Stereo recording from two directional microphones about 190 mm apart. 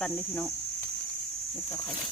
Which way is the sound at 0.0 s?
10° left (ahead or behind).